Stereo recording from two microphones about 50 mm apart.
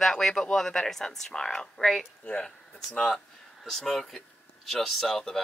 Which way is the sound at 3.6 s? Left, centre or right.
Centre.